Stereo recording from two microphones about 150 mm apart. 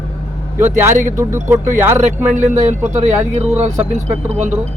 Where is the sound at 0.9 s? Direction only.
60° right (ahead or behind).